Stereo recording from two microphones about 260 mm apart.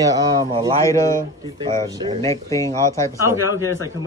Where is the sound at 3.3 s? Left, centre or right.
Centre.